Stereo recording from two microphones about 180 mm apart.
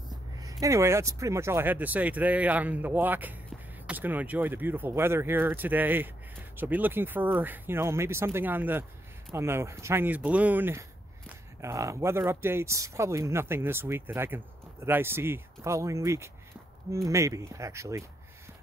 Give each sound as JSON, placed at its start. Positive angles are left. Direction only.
{"t": 0.1, "sound": "speech", "side_deg": -20}